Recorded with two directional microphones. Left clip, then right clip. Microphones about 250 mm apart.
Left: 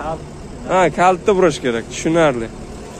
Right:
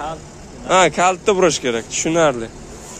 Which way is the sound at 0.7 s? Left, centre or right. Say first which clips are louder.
Even; right.